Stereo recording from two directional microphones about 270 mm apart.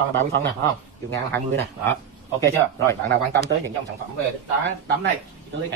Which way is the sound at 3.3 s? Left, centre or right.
Right.